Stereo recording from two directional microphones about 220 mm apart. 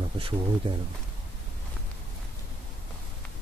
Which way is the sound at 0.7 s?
20° right (ahead or behind).